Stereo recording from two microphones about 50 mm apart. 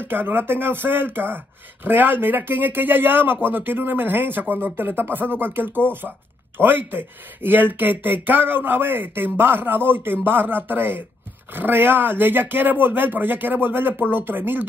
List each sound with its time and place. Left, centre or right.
0.0 s speech: right